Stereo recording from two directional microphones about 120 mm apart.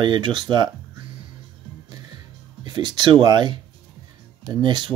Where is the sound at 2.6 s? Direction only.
40° right (ahead or behind).